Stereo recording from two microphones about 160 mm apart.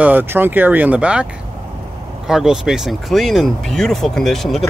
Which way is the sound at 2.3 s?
5° right (ahead or behind).